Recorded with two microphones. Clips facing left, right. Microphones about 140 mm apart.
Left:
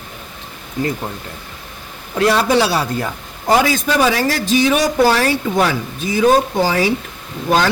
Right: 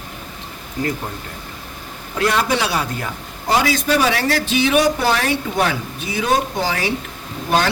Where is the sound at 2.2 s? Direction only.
35° left (ahead or behind).